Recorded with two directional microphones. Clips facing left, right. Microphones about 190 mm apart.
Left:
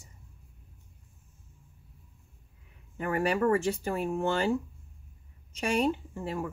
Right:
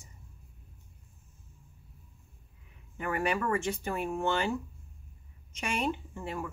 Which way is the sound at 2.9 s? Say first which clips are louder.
Left 3 dB; 35° left (ahead or behind).